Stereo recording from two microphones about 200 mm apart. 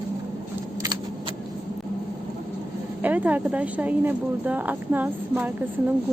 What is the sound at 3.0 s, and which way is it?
Speech, 10° right (ahead or behind).